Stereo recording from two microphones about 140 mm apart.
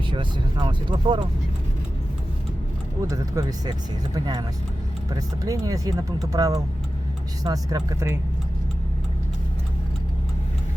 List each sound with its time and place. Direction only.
0.1 s speech: 35° right (ahead or behind)
3.0 s speech: 25° right (ahead or behind)